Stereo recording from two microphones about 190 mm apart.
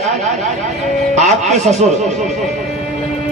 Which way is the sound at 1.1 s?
40° right (ahead or behind).